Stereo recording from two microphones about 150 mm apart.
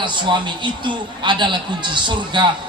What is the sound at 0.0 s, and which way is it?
A man's voice, 30° right (ahead or behind).